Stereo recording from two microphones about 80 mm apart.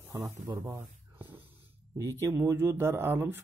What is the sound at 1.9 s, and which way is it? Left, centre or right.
Speech, right.